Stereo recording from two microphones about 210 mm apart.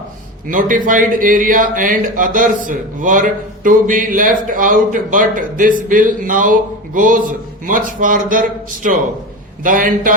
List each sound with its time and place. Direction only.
0.4 s speech: 40° right (ahead or behind)